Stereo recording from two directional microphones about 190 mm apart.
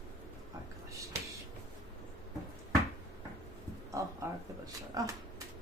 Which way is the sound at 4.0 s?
15° right (ahead or behind).